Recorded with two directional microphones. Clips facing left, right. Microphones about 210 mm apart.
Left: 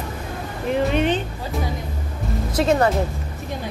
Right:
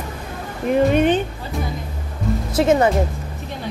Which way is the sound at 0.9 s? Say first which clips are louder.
Right 4 dB; 50° right (ahead or behind).